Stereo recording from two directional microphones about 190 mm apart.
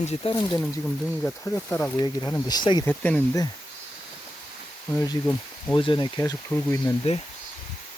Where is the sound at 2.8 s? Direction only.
10° left (ahead or behind).